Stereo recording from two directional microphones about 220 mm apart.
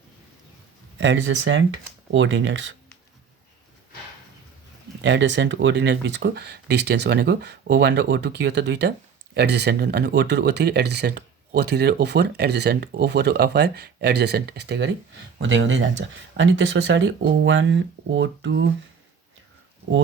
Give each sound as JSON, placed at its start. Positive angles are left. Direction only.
{"t": 0.9, "sound": "speech", "side_deg": -55}
{"t": 5.0, "sound": "speech", "side_deg": -55}